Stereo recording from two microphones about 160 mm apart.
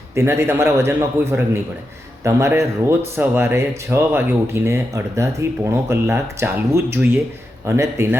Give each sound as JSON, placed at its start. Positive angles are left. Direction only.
{"t": 0.2, "sound": "speech", "side_deg": -15}